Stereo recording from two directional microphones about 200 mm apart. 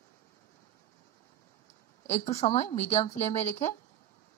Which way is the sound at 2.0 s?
35° left (ahead or behind).